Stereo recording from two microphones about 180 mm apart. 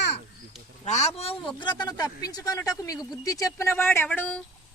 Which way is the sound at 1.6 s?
25° left (ahead or behind).